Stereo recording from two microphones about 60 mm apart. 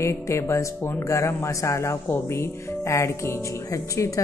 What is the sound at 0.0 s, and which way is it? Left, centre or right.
Speech, left.